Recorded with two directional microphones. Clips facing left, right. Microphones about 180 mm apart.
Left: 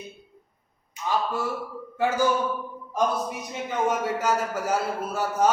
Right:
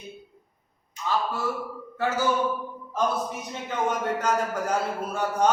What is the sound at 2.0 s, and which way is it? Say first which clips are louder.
Speech: left 2 dB; 15° left (ahead or behind).